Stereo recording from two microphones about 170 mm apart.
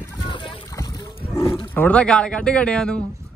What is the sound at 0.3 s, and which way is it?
Splash, 30° left (ahead or behind).